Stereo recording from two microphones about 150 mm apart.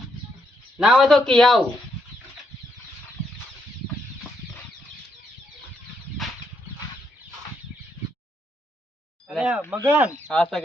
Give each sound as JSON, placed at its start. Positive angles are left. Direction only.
{"t": 0.8, "sound": "speech", "side_deg": -5}
{"t": 9.2, "sound": "a sound", "side_deg": -5}
{"t": 9.7, "sound": "speech", "side_deg": -15}
{"t": 10.2, "sound": "speech", "side_deg": 5}